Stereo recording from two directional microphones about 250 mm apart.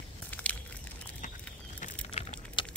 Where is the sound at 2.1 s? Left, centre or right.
Left.